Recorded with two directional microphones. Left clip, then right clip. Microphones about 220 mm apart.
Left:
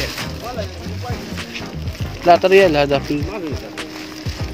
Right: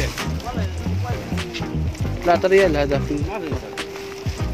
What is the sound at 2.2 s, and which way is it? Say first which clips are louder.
Speech: left 5 dB; 15° left (ahead or behind).